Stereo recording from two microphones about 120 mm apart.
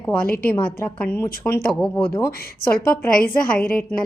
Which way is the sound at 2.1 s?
25° left (ahead or behind).